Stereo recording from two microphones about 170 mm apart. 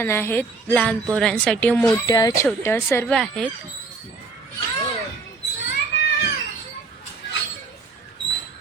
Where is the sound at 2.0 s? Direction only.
20° left (ahead or behind); by 3.5 s 5° left (ahead or behind).